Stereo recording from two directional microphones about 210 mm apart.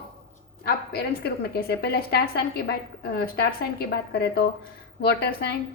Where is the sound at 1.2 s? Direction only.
50° left (ahead or behind).